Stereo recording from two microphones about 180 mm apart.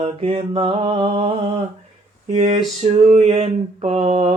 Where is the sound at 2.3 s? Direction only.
35° right (ahead or behind).